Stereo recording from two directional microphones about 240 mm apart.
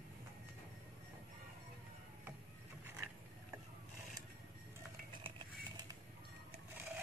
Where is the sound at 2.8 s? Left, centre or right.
Centre.